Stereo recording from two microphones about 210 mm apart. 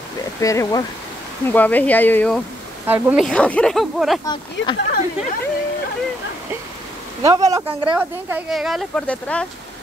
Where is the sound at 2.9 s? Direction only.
5° right (ahead or behind).